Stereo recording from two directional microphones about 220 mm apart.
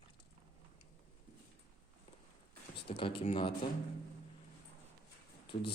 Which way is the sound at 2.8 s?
25° left (ahead or behind).